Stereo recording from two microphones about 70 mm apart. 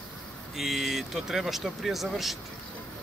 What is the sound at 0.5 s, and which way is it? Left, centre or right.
Speech, centre.